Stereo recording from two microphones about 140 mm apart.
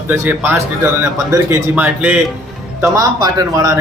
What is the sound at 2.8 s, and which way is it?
Speech, 25° right (ahead or behind).